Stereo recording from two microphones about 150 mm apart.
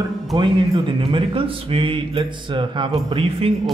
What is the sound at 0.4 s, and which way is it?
Speech, 35° right (ahead or behind).